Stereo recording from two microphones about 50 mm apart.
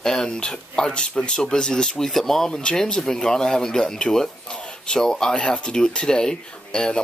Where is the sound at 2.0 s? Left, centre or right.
Centre.